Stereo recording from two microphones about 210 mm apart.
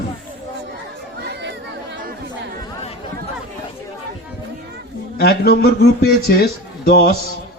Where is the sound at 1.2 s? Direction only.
55° right (ahead or behind).